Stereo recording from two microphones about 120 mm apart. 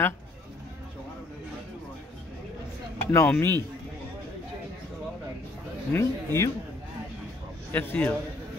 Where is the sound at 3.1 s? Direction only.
20° left (ahead or behind).